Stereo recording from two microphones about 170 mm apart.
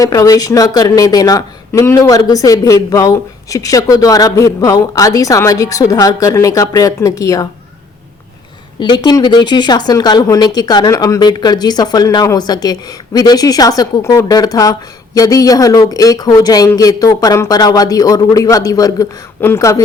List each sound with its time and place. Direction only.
0.0 s speech: 20° left (ahead or behind)
8.8 s speech: 25° left (ahead or behind)